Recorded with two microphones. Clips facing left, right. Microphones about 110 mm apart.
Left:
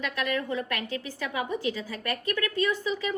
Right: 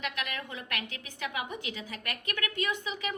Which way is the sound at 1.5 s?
20° right (ahead or behind).